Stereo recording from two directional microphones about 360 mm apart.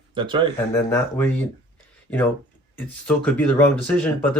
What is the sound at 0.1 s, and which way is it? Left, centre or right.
Speech, centre.